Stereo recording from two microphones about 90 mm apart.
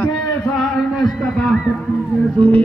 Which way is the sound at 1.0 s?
5° left (ahead or behind).